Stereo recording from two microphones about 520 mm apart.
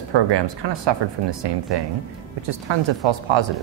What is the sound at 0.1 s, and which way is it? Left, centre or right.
Speech, right.